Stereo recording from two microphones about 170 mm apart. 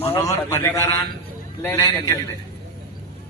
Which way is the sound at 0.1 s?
15° left (ahead or behind).